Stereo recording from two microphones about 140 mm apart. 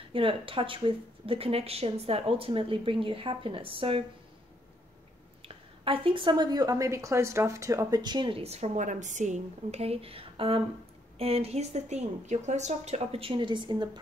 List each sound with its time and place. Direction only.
0.1 s a woman's voice: 40° right (ahead or behind)
5.4 s a woman's voice: 40° right (ahead or behind)